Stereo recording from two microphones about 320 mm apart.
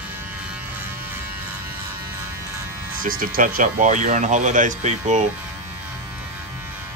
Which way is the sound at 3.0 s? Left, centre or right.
Right.